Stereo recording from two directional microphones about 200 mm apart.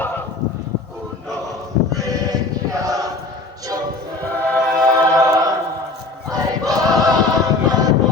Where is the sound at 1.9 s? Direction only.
15° right (ahead or behind).